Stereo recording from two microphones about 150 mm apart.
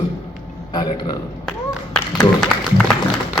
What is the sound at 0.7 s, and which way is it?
Speech, 30° left (ahead or behind).